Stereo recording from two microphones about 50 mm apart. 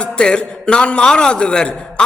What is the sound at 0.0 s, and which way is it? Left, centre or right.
A man's voice, centre.